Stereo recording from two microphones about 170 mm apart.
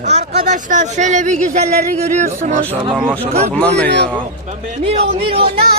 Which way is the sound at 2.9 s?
5° right (ahead or behind).